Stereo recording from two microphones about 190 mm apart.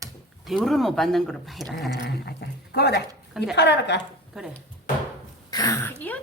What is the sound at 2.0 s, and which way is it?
A woman's voice, 60° left (ahead or behind).